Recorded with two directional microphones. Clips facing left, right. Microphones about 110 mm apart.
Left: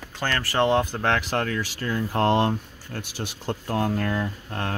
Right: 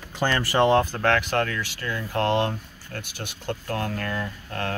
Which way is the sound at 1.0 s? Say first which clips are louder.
Right 2 dB; 30° left (ahead or behind).